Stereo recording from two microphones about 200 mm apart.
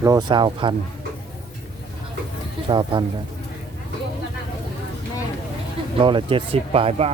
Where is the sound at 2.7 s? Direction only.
20° right (ahead or behind).